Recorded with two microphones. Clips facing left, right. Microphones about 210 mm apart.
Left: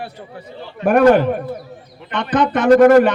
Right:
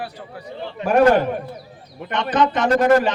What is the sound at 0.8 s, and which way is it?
A man's voice, 55° left (ahead or behind).